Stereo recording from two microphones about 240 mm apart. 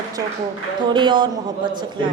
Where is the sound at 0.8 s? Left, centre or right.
Centre.